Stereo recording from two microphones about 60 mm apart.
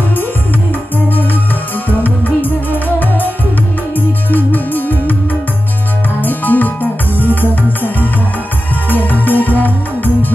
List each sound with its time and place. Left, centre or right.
2.0 s music: left
6.2 s music: left
7.2 s music: right
8.9 s music: left